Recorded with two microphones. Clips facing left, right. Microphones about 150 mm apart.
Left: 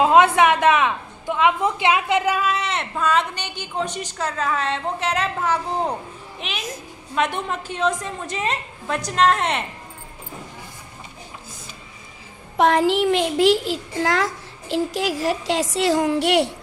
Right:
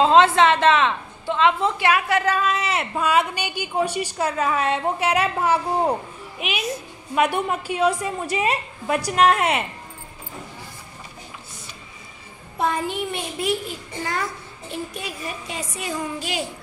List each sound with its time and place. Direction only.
0.0 s a woman's voice: 10° left (ahead or behind)
2.5 s a woman's voice: 5° right (ahead or behind)
12.5 s a child's voice: 90° left; by 16.5 s 70° left (ahead or behind)